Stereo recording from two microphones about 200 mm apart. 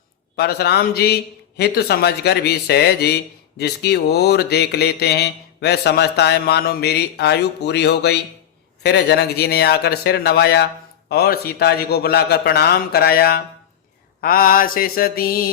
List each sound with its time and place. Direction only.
0.3 s a man's voice: 55° left (ahead or behind)